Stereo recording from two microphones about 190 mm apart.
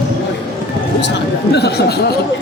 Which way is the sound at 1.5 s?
60° left (ahead or behind).